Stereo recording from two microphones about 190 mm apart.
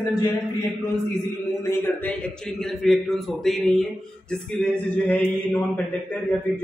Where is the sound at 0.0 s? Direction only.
20° left (ahead or behind).